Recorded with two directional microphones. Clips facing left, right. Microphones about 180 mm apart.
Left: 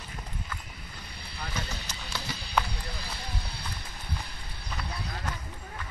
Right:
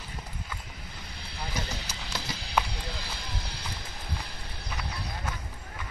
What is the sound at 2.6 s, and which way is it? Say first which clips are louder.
Clip-clop: even; 10° right (ahead or behind).